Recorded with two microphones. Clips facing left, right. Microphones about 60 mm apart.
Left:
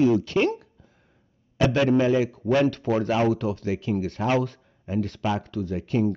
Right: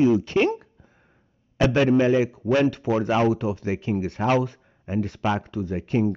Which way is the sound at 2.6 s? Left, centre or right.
Centre.